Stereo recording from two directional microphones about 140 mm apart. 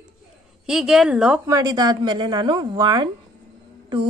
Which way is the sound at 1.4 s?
25° right (ahead or behind).